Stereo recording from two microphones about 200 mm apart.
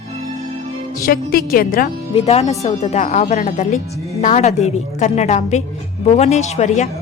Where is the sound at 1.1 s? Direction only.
45° left (ahead or behind).